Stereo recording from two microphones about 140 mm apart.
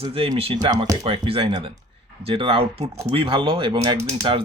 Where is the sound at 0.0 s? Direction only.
40° right (ahead or behind).